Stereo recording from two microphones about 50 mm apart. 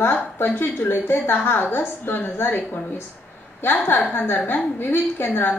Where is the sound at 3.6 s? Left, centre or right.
Left.